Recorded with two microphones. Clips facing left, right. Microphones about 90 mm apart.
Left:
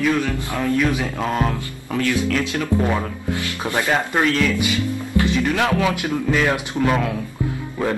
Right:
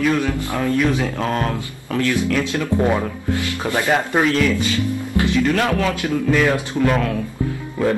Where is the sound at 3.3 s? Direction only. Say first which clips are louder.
Right 2 dB; 20° left (ahead or behind).